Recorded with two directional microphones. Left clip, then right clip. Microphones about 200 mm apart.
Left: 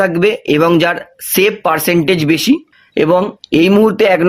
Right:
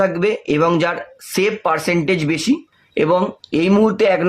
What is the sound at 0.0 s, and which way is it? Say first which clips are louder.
Speech: left 4 dB; 45° left (ahead or behind).